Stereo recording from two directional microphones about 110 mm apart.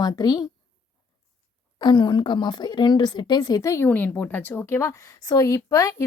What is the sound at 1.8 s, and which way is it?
Speech, 40° left (ahead or behind).